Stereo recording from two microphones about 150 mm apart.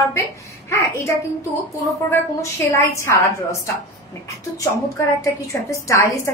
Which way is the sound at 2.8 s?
20° left (ahead or behind).